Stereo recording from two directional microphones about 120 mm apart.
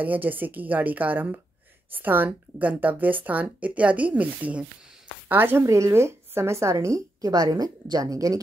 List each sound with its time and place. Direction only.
0.0 s a woman's voice: 15° right (ahead or behind)